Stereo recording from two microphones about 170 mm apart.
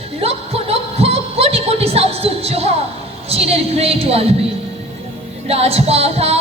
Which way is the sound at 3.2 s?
35° right (ahead or behind).